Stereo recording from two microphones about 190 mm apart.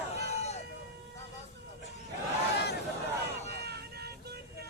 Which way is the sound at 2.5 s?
60° left (ahead or behind).